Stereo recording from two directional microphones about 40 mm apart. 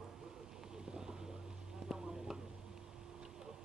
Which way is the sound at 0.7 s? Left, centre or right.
Centre.